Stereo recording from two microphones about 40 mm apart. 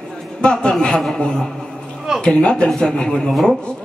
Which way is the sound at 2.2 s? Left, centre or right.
Left.